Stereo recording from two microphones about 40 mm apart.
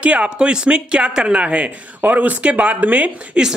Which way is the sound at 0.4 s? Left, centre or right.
Right.